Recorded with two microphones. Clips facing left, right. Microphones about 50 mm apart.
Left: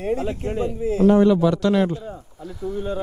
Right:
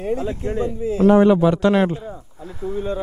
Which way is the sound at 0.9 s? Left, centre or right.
Right.